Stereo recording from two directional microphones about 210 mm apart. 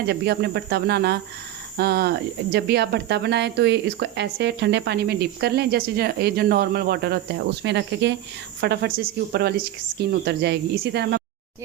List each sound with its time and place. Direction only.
0.0 s speech: 50° right (ahead or behind)